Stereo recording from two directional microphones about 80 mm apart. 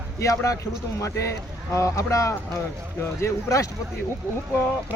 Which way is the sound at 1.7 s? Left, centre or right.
Left.